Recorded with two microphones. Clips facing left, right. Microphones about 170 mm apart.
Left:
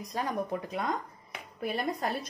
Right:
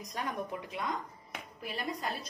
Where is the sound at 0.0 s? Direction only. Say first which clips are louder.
Left 5 dB; 30° left (ahead or behind).